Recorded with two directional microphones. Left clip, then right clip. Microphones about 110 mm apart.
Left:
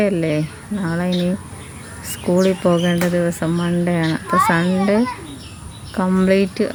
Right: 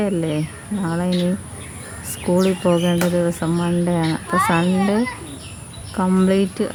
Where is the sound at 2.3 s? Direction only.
15° left (ahead or behind).